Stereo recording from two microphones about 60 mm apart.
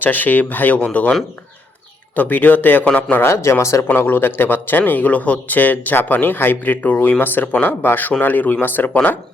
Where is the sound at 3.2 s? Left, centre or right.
Left.